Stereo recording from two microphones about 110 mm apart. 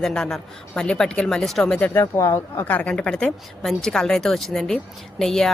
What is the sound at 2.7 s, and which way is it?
A woman's voice, 10° left (ahead or behind).